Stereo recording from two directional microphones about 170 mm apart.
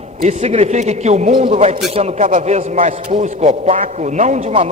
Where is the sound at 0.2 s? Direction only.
40° right (ahead or behind).